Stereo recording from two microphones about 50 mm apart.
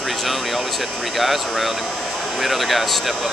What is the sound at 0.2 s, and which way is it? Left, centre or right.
Speech, centre.